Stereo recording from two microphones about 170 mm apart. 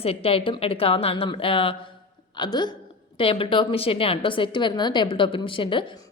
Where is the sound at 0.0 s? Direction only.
35° left (ahead or behind).